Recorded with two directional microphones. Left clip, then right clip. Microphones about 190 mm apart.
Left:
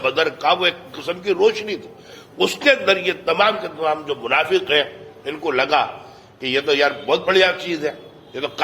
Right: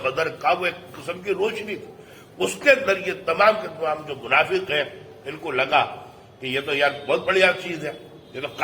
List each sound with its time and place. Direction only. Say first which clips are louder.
0.0 s a man's voice: left 4 dB; 40° left (ahead or behind)